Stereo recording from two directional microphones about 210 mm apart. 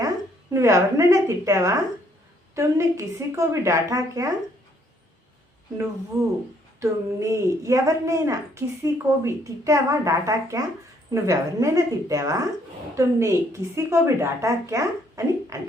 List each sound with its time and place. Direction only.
0.5 s a woman's voice: 15° right (ahead or behind)
6.7 s a woman's voice: 15° right (ahead or behind)